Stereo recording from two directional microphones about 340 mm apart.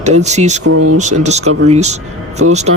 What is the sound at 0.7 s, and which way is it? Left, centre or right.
Speech, right.